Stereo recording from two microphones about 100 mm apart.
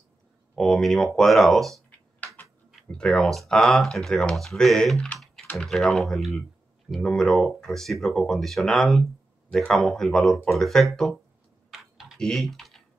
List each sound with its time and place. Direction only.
0.6 s speech: 5° left (ahead or behind)
1.9 s a sound: 15° left (ahead or behind)
3.0 s speech: 10° left (ahead or behind)
5.2 s typing: centre (ahead or behind)
5.5 s speech: 5° left (ahead or behind)
12.2 s speech: 5° left (ahead or behind)